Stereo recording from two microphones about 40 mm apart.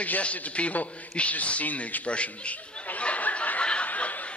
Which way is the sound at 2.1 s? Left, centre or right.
Left.